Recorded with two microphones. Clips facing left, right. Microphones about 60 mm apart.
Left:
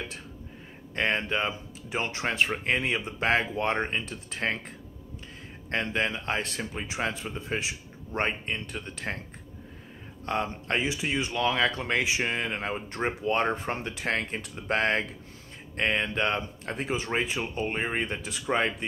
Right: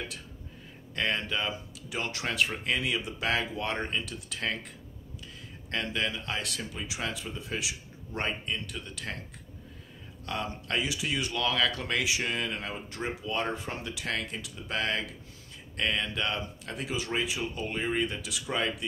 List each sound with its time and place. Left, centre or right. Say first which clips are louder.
0.9 s speech: left 3 dB; left
5.7 s speech: left 3 dB; left
10.2 s speech: left 5 dB; left